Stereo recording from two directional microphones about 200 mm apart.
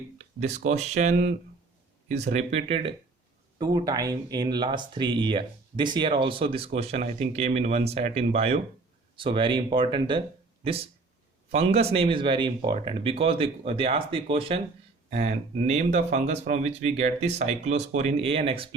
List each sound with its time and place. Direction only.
0.5 s speech: 35° right (ahead or behind)